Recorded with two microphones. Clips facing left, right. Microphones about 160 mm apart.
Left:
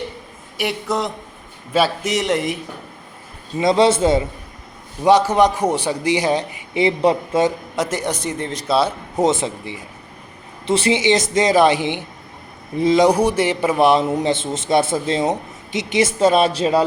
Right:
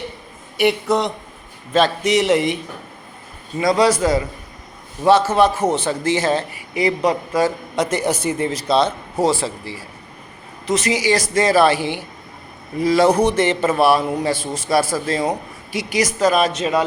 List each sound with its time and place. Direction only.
0.5 s a man's voice: centre (ahead or behind)
3.6 s a man's voice: 25° left (ahead or behind)
5.0 s a man's voice: 15° left (ahead or behind)
7.8 s a man's voice: centre (ahead or behind)
9.1 s a man's voice: 20° left (ahead or behind)